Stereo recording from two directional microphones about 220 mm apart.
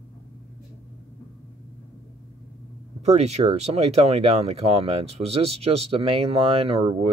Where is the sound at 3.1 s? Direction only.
30° right (ahead or behind).